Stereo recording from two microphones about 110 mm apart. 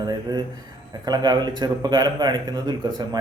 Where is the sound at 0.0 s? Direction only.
40° right (ahead or behind).